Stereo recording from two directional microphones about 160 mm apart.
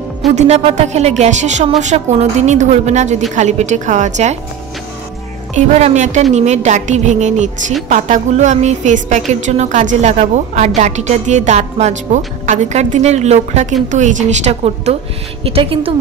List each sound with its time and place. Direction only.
0.4 s a woman's voice: 45° right (ahead or behind)
5.5 s a woman's voice: 50° right (ahead or behind)